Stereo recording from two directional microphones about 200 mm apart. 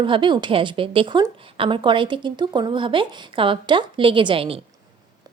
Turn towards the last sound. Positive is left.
turn(degrees=-25)  # may be behind; listen again after turning